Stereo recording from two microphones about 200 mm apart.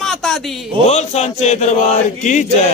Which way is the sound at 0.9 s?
35° left (ahead or behind).